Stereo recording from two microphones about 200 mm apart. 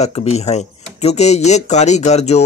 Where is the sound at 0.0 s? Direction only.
30° left (ahead or behind).